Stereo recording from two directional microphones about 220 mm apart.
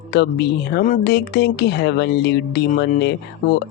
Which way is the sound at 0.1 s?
45° left (ahead or behind).